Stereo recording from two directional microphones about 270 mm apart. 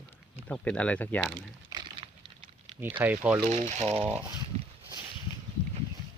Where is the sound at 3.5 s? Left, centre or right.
Right.